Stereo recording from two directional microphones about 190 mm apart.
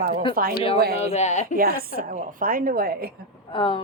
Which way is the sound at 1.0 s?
35° left (ahead or behind).